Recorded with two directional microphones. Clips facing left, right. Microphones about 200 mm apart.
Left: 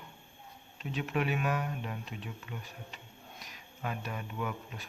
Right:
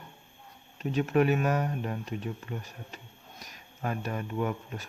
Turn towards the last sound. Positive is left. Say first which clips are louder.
# right 6 dB
turn(degrees=-45)  # may be behind; listen again after turning